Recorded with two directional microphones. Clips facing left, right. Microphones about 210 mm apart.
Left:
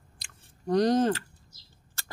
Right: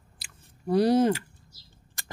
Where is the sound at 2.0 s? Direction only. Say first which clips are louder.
Right 2 dB; 15° right (ahead or behind).